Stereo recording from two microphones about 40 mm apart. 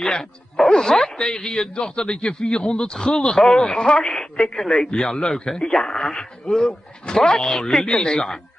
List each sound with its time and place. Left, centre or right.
0.0 s speech: centre
7.8 s speech: left
8.1 s speech: centre